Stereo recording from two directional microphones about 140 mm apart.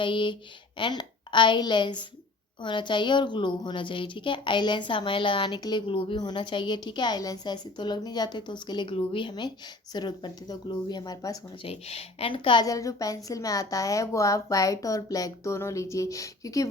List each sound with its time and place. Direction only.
0.0 s a woman's voice: 35° left (ahead or behind)
11.6 s a woman's voice: 45° left (ahead or behind); by 16.6 s 25° left (ahead or behind)